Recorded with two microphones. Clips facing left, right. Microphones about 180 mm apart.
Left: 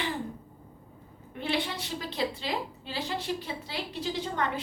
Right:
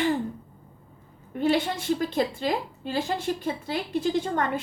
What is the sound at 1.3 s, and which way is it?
A woman's voice, 45° right (ahead or behind).